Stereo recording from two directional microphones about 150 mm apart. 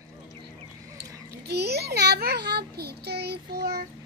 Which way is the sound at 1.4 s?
90° right.